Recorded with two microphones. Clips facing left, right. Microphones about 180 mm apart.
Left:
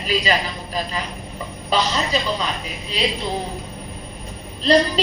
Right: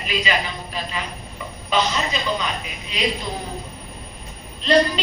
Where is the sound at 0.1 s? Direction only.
35° left (ahead or behind).